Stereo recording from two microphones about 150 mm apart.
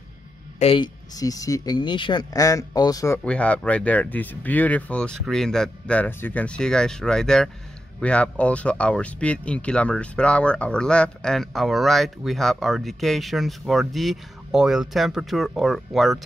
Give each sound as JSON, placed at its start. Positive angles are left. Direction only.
{"t": 0.6, "sound": "a woman's voice", "side_deg": 40}
{"t": 1.1, "sound": "speech", "side_deg": 25}
{"t": 3.3, "sound": "speech", "side_deg": 10}